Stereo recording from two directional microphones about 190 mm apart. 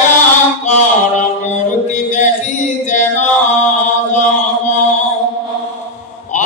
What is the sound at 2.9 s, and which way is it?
Chant, 40° left (ahead or behind).